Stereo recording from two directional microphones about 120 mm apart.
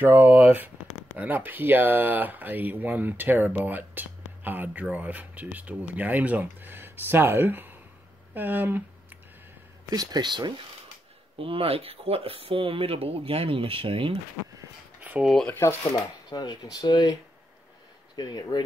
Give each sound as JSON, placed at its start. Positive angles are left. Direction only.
{"t": 0.0, "sound": "speech", "side_deg": -15}
{"t": 9.8, "sound": "speech", "side_deg": -35}
{"t": 11.3, "sound": "speech", "side_deg": -50}
{"t": 15.0, "sound": "a sound", "side_deg": -10}
{"t": 15.4, "sound": "speech", "side_deg": 20}
{"t": 15.9, "sound": "speech", "side_deg": 35}